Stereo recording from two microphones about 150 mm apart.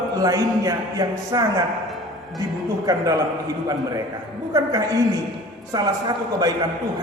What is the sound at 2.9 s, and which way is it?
A man's voice, 25° right (ahead or behind).